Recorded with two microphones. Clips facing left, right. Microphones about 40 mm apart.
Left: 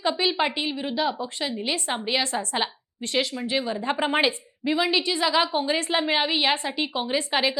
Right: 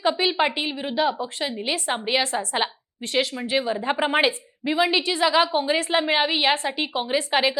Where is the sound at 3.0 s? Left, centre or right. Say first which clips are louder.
Right 2 dB; right.